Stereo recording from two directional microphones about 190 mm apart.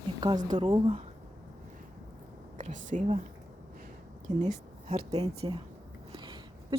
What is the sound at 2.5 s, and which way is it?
Speech, 40° right (ahead or behind).